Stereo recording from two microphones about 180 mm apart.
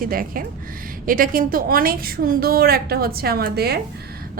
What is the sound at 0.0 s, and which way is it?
A woman's voice, 50° right (ahead or behind).